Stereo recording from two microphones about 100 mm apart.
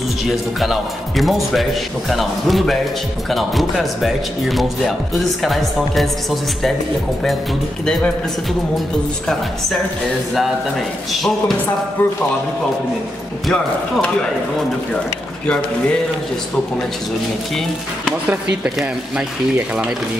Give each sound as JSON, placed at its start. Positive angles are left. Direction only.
{"t": 0.2, "sound": "speech", "side_deg": 0}
{"t": 7.8, "sound": "speech", "side_deg": 5}
{"t": 11.1, "sound": "speech", "side_deg": 0}
{"t": 12.0, "sound": "speech", "side_deg": 15}
{"t": 13.5, "sound": "speech", "side_deg": 5}
{"t": 18.3, "sound": "speech", "side_deg": -10}